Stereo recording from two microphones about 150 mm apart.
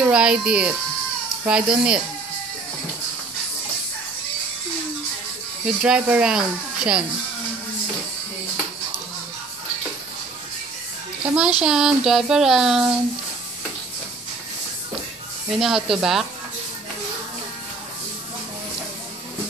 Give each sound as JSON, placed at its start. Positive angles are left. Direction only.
{"t": 0.0, "sound": "speech", "side_deg": -5}
{"t": 5.7, "sound": "speech", "side_deg": -5}
{"t": 11.2, "sound": "speech", "side_deg": -5}
{"t": 15.5, "sound": "speech", "side_deg": 0}